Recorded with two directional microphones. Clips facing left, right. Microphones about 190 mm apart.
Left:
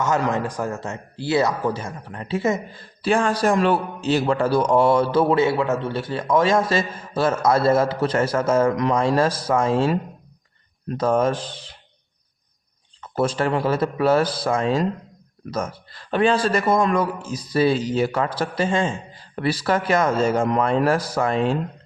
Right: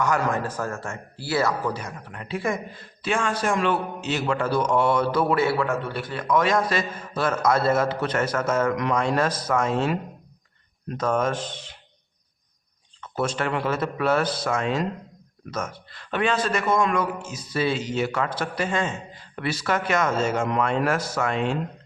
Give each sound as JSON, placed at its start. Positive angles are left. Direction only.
{"t": 0.0, "sound": "a man's voice", "side_deg": 20}
{"t": 13.0, "sound": "a man's voice", "side_deg": 30}